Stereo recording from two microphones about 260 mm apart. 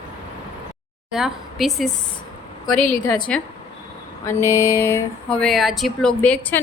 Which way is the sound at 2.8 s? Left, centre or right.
Left.